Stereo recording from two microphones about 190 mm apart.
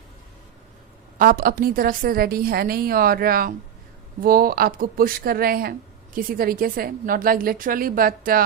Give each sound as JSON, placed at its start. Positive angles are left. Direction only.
{"t": 1.2, "sound": "a woman's voice", "side_deg": -50}